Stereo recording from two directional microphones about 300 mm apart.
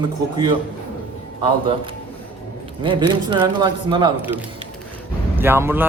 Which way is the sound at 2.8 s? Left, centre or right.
Centre.